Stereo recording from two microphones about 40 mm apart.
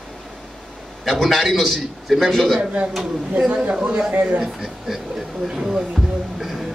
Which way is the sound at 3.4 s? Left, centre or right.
Right.